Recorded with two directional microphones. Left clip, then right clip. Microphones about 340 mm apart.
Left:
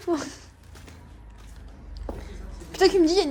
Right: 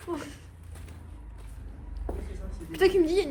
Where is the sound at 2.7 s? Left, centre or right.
Centre.